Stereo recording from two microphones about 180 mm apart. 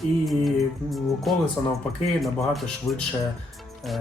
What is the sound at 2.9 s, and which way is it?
Speech, 15° left (ahead or behind).